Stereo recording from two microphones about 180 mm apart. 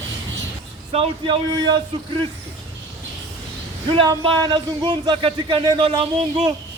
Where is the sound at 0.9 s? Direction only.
30° right (ahead or behind).